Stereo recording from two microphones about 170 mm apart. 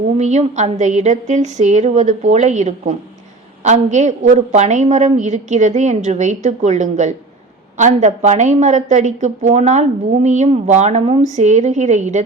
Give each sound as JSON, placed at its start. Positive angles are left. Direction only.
{"t": 0.2, "sound": "a woman's voice", "side_deg": -45}